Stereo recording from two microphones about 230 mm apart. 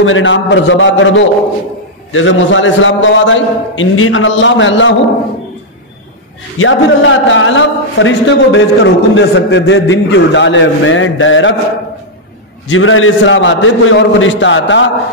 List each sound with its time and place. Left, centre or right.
0.0 s a man's voice: left
6.6 s a man's voice: left
12.6 s a man's voice: left